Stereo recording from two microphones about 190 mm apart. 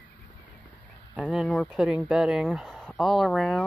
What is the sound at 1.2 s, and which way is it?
Speech, centre (ahead or behind).